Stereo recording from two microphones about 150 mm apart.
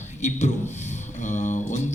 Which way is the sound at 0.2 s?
50° left (ahead or behind).